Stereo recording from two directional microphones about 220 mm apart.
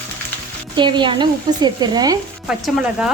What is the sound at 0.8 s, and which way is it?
Speech, 20° right (ahead or behind).